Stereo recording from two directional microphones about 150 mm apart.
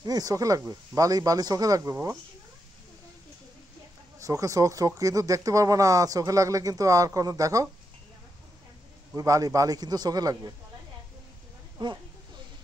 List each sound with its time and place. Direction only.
0.0 s speech: 25° right (ahead or behind)
4.2 s speech: 20° right (ahead or behind)
9.1 s speech: 25° right (ahead or behind)
11.8 s speech: 30° right (ahead or behind)